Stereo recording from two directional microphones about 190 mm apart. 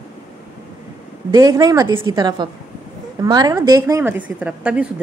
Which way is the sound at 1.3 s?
20° right (ahead or behind).